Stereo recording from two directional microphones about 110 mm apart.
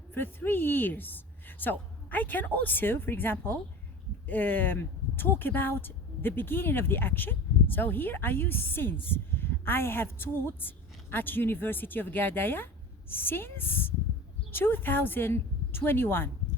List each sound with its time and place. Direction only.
0.1 s a woman's voice: 20° left (ahead or behind)